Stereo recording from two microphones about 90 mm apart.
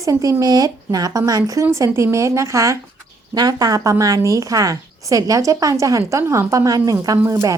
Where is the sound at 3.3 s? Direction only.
45° right (ahead or behind).